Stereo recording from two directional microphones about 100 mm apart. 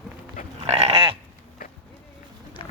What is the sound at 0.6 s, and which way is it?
Goat, 90° right.